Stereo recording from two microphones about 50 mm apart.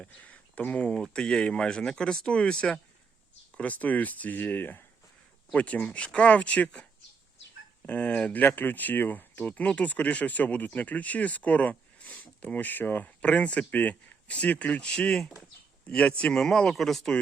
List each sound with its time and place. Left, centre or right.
0.2 s a sound: left
1.0 s speech: centre
3.6 s speech: left
5.5 s speech: left
7.9 s speech: left
13.2 s speech: left
14.8 s speech: centre